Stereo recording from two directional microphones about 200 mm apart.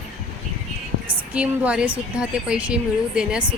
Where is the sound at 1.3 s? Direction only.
5° right (ahead or behind).